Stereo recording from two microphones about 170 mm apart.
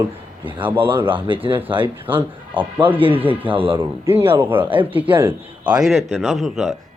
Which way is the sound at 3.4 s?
30° right (ahead or behind).